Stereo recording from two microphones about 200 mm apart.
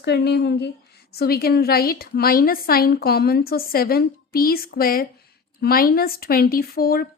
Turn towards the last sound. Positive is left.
turn(degrees=50)  # may be behind; listen again after turning